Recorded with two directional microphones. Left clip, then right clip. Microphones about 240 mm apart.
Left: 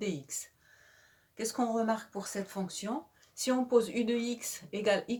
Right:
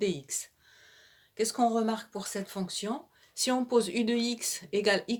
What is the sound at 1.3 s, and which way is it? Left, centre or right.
Speech, right.